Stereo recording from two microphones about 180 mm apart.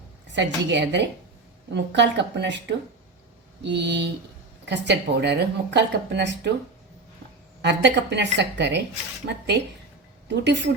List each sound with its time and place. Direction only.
0.3 s speech: 75° right (ahead or behind)
7.6 s speech: 70° right (ahead or behind)
10.2 s speech: 75° right (ahead or behind)